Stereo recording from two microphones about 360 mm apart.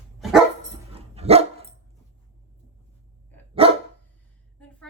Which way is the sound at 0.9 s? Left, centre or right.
Centre.